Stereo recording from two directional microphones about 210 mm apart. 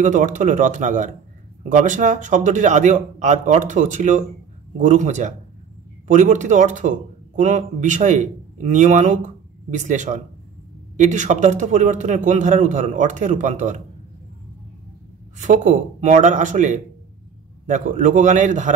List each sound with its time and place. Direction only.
0.0 s a man's voice: 35° right (ahead or behind)
15.3 s a man's voice: 35° right (ahead or behind)